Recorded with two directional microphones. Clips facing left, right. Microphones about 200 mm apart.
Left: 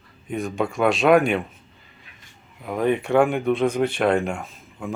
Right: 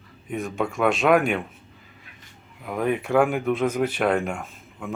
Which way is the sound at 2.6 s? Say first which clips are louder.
Left 3 dB; centre (ahead or behind).